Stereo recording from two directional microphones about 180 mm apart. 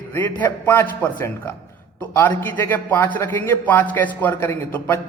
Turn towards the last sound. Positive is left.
turn(degrees=15)  # may be behind; listen again after turning